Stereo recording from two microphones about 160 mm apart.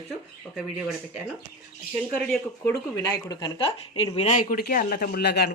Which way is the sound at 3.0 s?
25° left (ahead or behind).